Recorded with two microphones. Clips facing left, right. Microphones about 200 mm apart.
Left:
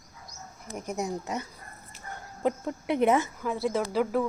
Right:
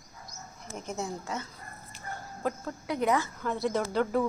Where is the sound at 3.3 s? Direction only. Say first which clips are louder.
Left 1 dB; 5° left (ahead or behind).